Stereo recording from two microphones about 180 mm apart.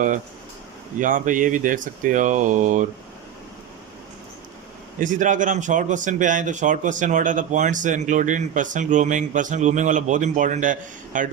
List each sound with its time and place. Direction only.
0.9 s a man's voice: 45° right (ahead or behind)
4.9 s a man's voice: 45° right (ahead or behind)